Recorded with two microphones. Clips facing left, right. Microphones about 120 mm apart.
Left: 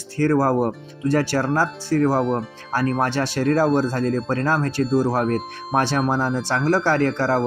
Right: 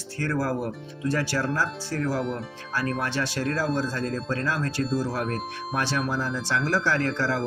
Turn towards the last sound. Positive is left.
turn(degrees=40)  # may be behind; listen again after turning